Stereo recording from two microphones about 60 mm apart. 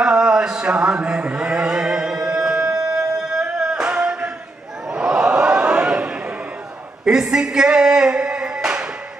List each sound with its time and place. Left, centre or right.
0.0 s chant: centre
3.5 s music: centre
4.9 s a sound: centre